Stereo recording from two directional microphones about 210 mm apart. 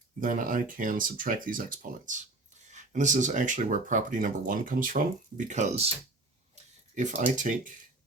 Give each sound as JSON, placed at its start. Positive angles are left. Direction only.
{"t": 0.2, "sound": "speech", "side_deg": -40}
{"t": 6.9, "sound": "speech", "side_deg": -35}